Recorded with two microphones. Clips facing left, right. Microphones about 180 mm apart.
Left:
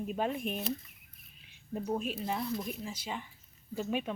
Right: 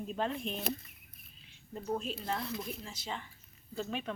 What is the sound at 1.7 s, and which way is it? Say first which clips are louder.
A woman's voice: left 2 dB; 15° left (ahead or behind).